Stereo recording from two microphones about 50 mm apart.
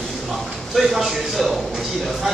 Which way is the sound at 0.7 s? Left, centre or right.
Centre.